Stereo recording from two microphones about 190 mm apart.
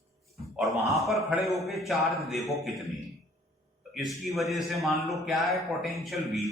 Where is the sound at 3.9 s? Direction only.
Centre (ahead or behind).